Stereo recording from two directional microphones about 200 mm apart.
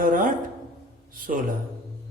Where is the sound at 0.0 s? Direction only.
45° right (ahead or behind).